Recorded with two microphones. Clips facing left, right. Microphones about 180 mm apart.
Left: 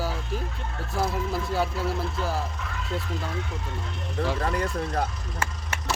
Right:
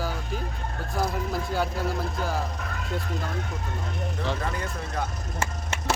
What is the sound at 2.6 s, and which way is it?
Vehicle, 45° right (ahead or behind).